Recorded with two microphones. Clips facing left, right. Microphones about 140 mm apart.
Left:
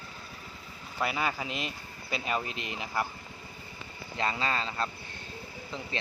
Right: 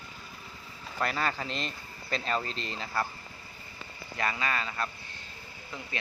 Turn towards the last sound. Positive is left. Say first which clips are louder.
# left 2 dB
turn(degrees=30)  # may be behind; listen again after turning